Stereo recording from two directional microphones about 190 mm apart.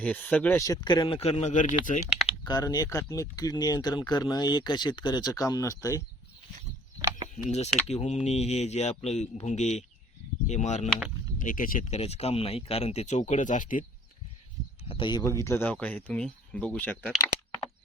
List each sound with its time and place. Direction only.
0.0 s speech: 10° left (ahead or behind); by 2.0 s 45° left (ahead or behind)
2.2 s speech: 20° left (ahead or behind)
7.3 s speech: 35° left (ahead or behind)
11.9 s speech: 35° left (ahead or behind)
14.8 s speech: 25° left (ahead or behind); by 17.1 s 10° left (ahead or behind)